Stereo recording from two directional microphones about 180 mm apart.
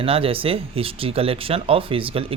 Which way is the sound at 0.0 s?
30° right (ahead or behind).